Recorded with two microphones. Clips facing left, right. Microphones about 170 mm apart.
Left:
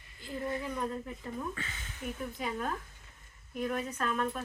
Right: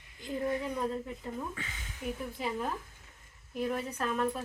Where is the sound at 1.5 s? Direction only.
15° right (ahead or behind).